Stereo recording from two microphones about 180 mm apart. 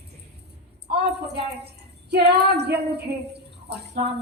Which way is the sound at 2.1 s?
65° right (ahead or behind).